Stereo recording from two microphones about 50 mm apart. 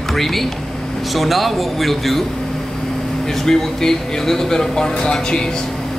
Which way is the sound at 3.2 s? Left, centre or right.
Centre.